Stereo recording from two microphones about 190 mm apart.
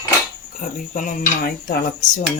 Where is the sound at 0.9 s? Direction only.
50° left (ahead or behind).